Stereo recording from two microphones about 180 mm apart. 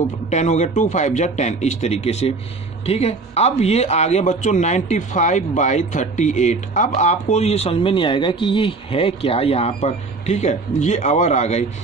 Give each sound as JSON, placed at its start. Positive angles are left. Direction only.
{"t": 0.3, "sound": "speech", "side_deg": 40}